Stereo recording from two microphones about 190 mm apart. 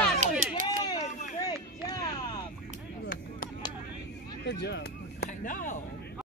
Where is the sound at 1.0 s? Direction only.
40° left (ahead or behind).